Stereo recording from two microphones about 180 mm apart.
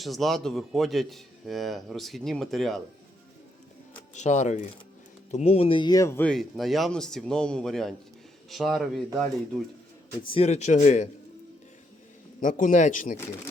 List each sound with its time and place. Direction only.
0.0 s speech: centre (ahead or behind)
4.1 s a man's voice: 40° left (ahead or behind); by 9.6 s centre (ahead or behind)
10.2 s a man's voice: 35° left (ahead or behind)
12.4 s speech: 45° left (ahead or behind)